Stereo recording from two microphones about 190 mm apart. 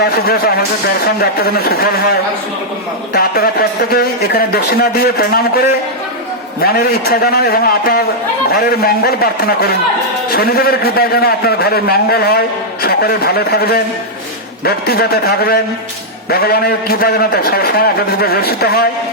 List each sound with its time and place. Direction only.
0.0 s a man's voice: 55° left (ahead or behind)
6.6 s a man's voice: 55° left (ahead or behind)